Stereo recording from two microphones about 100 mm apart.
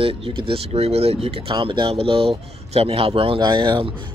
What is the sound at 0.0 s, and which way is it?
Speech, 70° right (ahead or behind).